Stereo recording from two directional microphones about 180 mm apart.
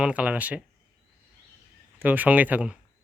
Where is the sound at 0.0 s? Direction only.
5° right (ahead or behind).